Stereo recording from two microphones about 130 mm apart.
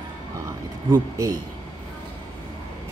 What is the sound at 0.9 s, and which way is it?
Speech, 25° right (ahead or behind).